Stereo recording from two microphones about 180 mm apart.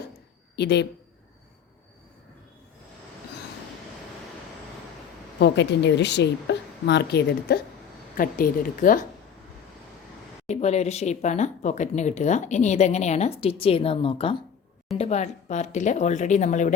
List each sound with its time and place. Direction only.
0.5 s a woman's voice: 70° left (ahead or behind)
5.4 s a woman's voice: 75° left (ahead or behind)
8.1 s a woman's voice: 50° left (ahead or behind)
10.5 s speech: 35° left (ahead or behind)